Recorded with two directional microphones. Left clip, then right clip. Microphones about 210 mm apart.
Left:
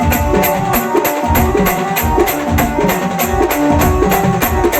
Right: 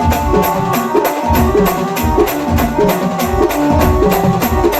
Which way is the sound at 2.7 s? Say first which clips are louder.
Right 1 dB; 25° left (ahead or behind).